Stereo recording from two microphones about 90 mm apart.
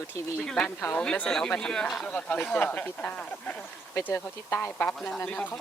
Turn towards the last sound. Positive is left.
turn(degrees=15)  # may be behind; listen again after turning